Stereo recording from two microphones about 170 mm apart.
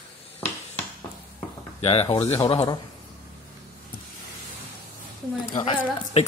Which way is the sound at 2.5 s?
20° left (ahead or behind).